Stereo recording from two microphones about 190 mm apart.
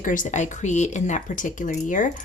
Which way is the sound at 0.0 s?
45° left (ahead or behind).